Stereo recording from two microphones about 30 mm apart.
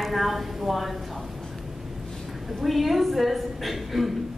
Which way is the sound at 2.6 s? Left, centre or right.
Centre.